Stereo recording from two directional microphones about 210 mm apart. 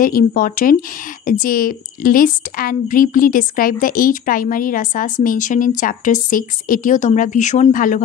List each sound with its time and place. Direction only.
0.0 s a woman's voice: 40° left (ahead or behind)